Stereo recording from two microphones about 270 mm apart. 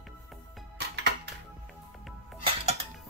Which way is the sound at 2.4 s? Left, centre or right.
Right.